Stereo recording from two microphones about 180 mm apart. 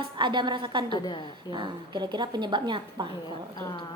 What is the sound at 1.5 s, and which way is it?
A woman's voice, 25° right (ahead or behind).